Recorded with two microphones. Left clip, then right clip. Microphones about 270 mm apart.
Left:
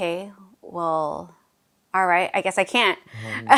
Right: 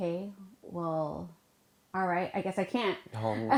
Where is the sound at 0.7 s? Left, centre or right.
Left.